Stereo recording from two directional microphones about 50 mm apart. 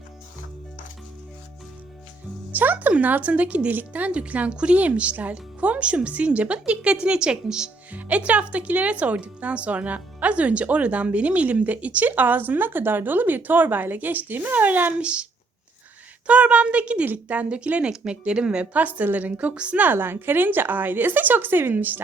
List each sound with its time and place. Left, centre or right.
2.5 s speech: right; by 7.7 s centre
7.9 s speech: right
15.0 s speech: right
19.8 s speech: right